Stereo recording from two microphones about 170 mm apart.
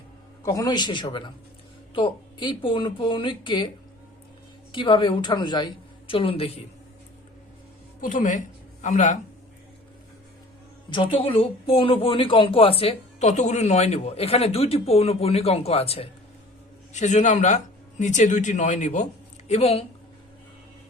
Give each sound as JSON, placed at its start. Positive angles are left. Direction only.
{"t": 0.4, "sound": "speech", "side_deg": 20}
{"t": 4.7, "sound": "speech", "side_deg": 30}
{"t": 8.0, "sound": "a woman's voice", "side_deg": 50}
{"t": 10.8, "sound": "speech", "side_deg": 30}